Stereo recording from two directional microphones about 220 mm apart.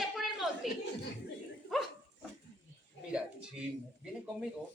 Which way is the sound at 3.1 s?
5° right (ahead or behind).